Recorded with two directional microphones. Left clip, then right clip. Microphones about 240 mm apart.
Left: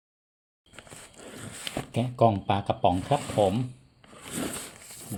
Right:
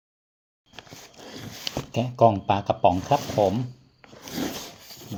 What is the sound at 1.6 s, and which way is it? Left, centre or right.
Speech, left.